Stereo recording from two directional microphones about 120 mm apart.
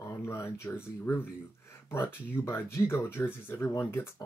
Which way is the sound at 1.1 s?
20° left (ahead or behind).